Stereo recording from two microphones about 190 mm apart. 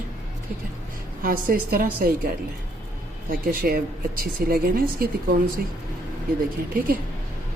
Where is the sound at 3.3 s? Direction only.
50° right (ahead or behind).